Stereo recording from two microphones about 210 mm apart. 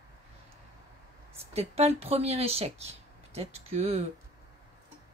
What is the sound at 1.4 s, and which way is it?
Speech, 30° right (ahead or behind).